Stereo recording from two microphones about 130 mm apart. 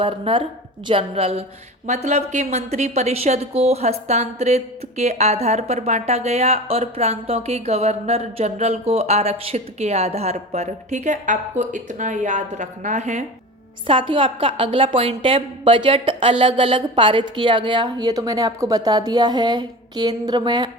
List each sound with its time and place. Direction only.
0.0 s a woman's voice: 40° right (ahead or behind); by 13.2 s 70° right (ahead or behind)
13.8 s a woman's voice: 40° right (ahead or behind)